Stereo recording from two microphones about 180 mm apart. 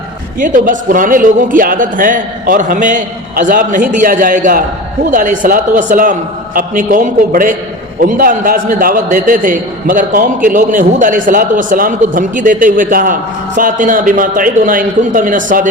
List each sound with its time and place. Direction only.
0.3 s a man's voice: 50° right (ahead or behind)